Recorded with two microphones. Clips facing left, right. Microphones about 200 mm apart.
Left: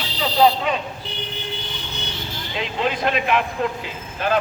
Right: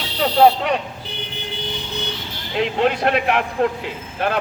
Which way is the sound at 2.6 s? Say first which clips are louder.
Right 5 dB; 65° right (ahead or behind).